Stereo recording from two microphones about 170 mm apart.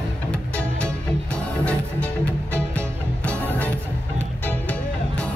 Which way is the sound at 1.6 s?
10° left (ahead or behind).